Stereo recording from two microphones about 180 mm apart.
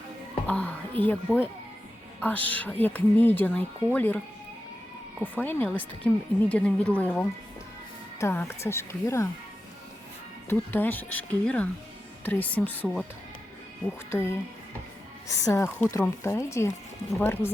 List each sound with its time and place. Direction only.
0.4 s a woman's voice: 5° left (ahead or behind)
5.2 s a woman's voice: 10° left (ahead or behind)
10.5 s a woman's voice: 10° left (ahead or behind)
14.1 s a woman's voice: 15° left (ahead or behind)